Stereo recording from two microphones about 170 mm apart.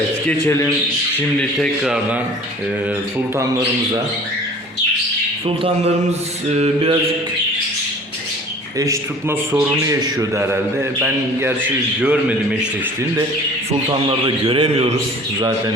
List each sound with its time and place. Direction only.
0.3 s a man's voice: 15° left (ahead or behind)
1.4 s a man's voice: 5° left (ahead or behind)
6.6 s a man's voice: 35° right (ahead or behind)
8.8 s a man's voice: 20° right (ahead or behind)
14.4 s a man's voice: 35° right (ahead or behind)